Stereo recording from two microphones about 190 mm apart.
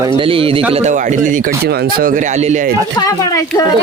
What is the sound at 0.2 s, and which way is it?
A man's voice, 30° right (ahead or behind).